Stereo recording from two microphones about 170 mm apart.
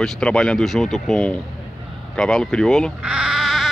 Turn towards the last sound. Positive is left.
turn(degrees=0)  # may be behind; listen again after turning